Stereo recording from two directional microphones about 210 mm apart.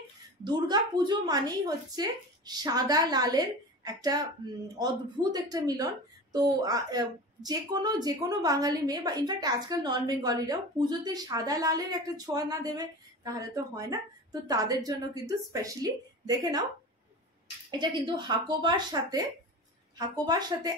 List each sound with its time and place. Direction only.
0.4 s a woman's voice: 20° right (ahead or behind)
17.6 s a woman's voice: 20° right (ahead or behind)